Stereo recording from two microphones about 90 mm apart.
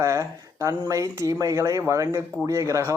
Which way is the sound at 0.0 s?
35° right (ahead or behind).